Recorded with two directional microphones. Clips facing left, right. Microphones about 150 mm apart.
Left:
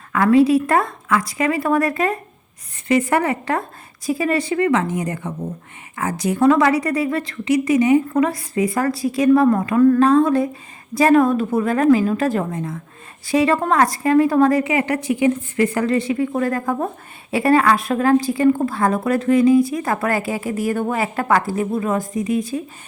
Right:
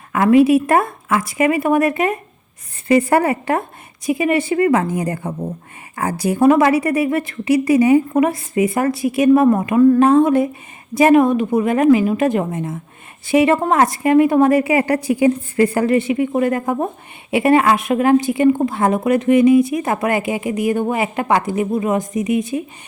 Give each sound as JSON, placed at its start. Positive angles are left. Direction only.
{"t": 0.1, "sound": "speech", "side_deg": -20}